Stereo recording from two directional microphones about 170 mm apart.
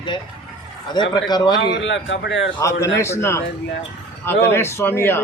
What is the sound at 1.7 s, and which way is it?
Speech, 90° left.